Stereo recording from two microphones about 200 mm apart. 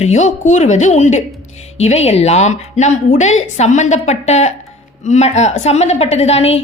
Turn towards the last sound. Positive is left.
turn(degrees=30)  # may be behind; listen again after turning